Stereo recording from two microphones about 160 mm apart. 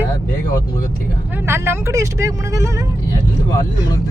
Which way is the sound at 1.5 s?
15° right (ahead or behind).